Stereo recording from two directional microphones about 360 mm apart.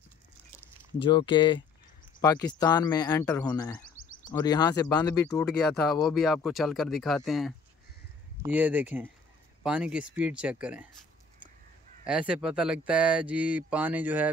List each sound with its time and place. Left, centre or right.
1.0 s speech: centre
12.1 s speech: centre